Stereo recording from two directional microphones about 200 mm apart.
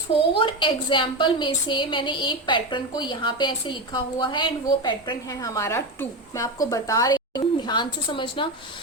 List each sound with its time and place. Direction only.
0.3 s a woman's voice: 25° left (ahead or behind)